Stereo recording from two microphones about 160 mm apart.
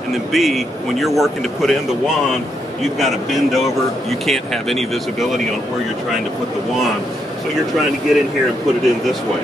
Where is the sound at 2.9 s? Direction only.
Centre (ahead or behind).